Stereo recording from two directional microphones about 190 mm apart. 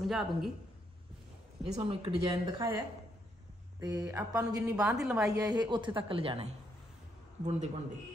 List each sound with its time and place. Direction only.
0.0 s a woman's voice: centre (ahead or behind)
1.6 s a woman's voice: 30° right (ahead or behind)
3.8 s a woman's voice: 20° right (ahead or behind)
4.8 s a woman's voice: centre (ahead or behind)
5.3 s a woman's voice: 20° right (ahead or behind); by 7.8 s 35° right (ahead or behind)